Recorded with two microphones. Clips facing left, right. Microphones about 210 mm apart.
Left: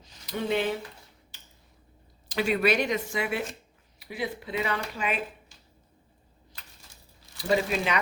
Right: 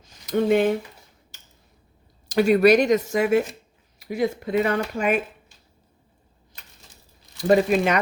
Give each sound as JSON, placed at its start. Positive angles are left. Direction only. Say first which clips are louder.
{"t": 0.0, "sound": "a sound", "louder": "right 10 dB", "side_deg": -50}
{"t": 2.3, "sound": "speech", "louder": "right 9 dB", "side_deg": -40}
{"t": 7.3, "sound": "speech", "louder": "right 8 dB", "side_deg": -50}